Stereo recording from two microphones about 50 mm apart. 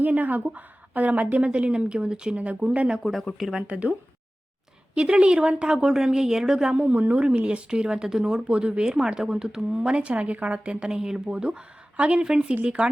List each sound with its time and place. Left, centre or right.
0.0 s a woman's voice: right
3.0 s speech: centre
4.9 s speech: centre
6.7 s a woman's voice: right
7.3 s speech: right